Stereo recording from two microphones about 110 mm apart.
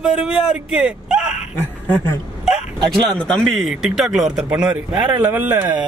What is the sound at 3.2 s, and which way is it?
Speech, 5° left (ahead or behind).